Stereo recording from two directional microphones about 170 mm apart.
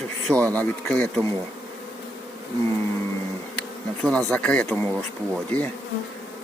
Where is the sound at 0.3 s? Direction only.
10° left (ahead or behind).